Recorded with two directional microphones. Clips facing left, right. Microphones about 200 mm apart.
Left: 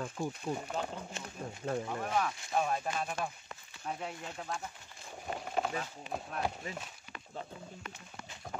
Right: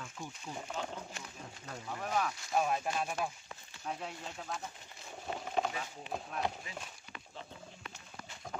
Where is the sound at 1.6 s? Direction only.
50° left (ahead or behind).